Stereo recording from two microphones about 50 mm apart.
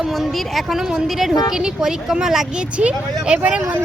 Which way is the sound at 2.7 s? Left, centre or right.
Right.